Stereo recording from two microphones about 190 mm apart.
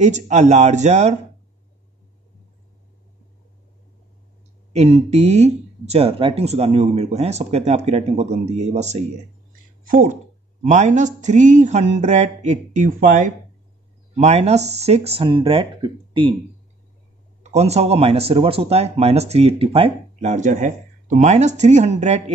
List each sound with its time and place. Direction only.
0.0 s speech: 40° right (ahead or behind)
4.7 s speech: 35° right (ahead or behind)
17.5 s speech: 35° right (ahead or behind)